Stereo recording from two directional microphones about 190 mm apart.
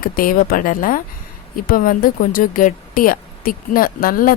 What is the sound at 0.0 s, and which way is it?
Speech, 45° left (ahead or behind).